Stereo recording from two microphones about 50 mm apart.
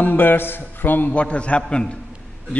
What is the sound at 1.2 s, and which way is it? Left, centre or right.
Speech, left.